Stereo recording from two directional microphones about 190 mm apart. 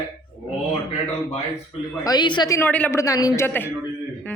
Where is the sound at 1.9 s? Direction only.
20° left (ahead or behind).